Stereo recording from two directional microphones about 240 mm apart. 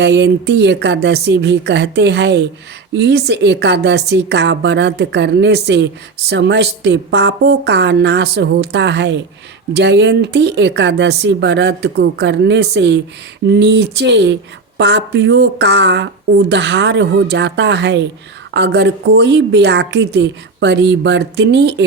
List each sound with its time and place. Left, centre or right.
0.0 s a woman's voice: right